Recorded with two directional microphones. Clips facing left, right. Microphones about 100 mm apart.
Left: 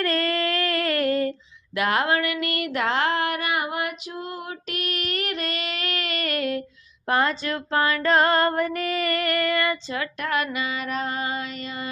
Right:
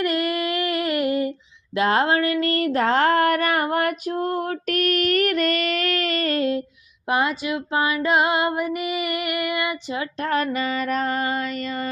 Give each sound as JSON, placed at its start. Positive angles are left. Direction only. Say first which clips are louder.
{"t": 0.0, "sound": "female singing", "louder": "right 1 dB", "side_deg": -15}
{"t": 1.7, "sound": "a sound", "louder": "right 3 dB", "side_deg": -30}
{"t": 7.1, "sound": "female singing", "louder": "right 1 dB", "side_deg": -15}